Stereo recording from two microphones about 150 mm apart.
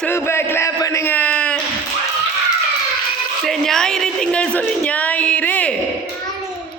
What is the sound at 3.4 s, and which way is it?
A woman's voice, centre (ahead or behind).